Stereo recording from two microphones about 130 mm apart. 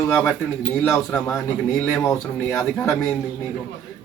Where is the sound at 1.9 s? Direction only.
20° left (ahead or behind).